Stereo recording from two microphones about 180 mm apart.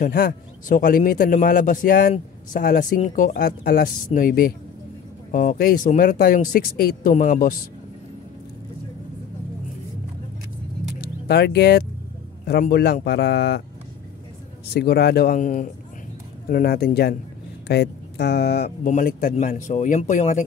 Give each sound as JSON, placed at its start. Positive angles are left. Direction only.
{"t": 0.0, "sound": "a man's voice", "side_deg": 50}
{"t": 11.0, "sound": "vehicle", "side_deg": 65}
{"t": 12.4, "sound": "a man's voice", "side_deg": 60}
{"t": 14.7, "sound": "speech", "side_deg": 65}
{"t": 18.9, "sound": "a man's voice", "side_deg": 45}